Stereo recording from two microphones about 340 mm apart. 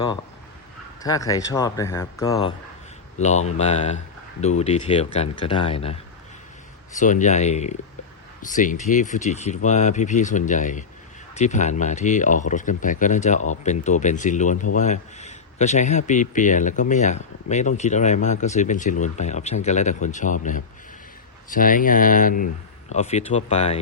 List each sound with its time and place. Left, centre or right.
1.0 s speech: centre
3.2 s a man's voice: centre